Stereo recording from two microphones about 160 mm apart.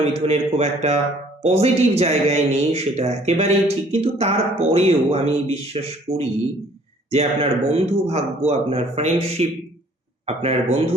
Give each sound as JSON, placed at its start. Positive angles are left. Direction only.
{"t": 0.0, "sound": "speech", "side_deg": -40}